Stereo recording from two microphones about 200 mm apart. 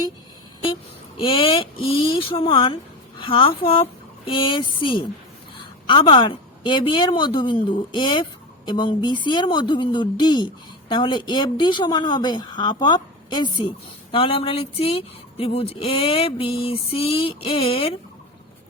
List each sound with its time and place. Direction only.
0.7 s a woman's voice: 25° left (ahead or behind)